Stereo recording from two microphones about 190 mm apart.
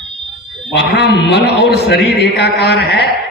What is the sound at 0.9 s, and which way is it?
A man's voice, 65° left (ahead or behind).